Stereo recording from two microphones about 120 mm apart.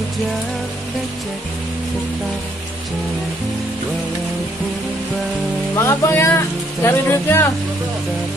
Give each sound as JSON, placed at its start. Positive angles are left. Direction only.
{"t": 5.8, "sound": "speech", "side_deg": 20}